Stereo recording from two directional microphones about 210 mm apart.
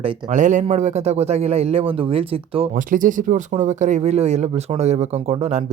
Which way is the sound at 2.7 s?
40° right (ahead or behind).